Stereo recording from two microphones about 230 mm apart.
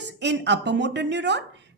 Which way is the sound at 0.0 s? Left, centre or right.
Right.